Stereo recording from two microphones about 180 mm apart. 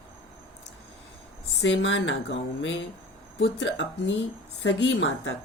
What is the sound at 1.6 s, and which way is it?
Speech, 80° left.